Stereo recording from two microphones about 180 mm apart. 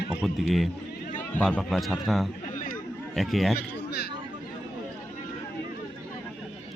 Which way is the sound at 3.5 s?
60° left (ahead or behind).